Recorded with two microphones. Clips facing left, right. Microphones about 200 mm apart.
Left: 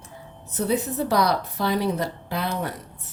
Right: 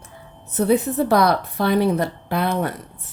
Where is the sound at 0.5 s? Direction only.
60° right (ahead or behind).